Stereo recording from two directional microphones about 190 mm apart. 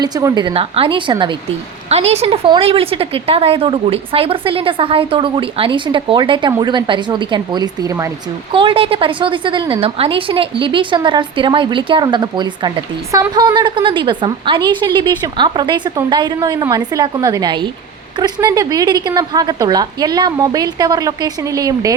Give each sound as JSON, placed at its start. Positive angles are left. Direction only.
{"t": 0.0, "sound": "a woman's voice", "side_deg": -20}
{"t": 8.5, "sound": "a woman's voice", "side_deg": -30}